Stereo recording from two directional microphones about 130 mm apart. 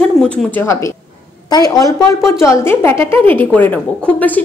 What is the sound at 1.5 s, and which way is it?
A woman's voice, 25° left (ahead or behind).